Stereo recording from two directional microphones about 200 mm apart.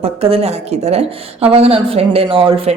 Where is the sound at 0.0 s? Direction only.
30° right (ahead or behind).